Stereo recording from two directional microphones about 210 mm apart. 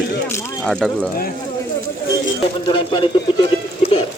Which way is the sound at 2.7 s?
20° left (ahead or behind).